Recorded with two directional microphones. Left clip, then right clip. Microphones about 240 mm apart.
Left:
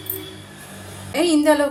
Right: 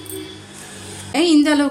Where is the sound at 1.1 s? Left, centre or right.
Right.